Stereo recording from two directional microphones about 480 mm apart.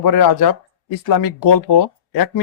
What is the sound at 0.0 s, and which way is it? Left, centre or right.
A man's voice, left.